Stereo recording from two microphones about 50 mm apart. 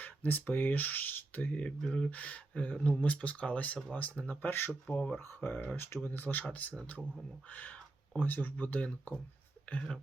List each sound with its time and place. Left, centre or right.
0.0 s speech: left
4.9 s speech: left
5.2 s speech: left
6.1 s speech: left